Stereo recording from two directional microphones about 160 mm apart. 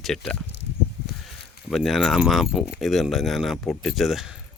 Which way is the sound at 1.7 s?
Centre (ahead or behind).